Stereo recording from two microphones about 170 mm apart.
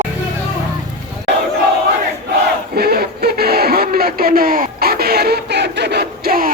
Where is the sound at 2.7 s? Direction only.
65° right (ahead or behind).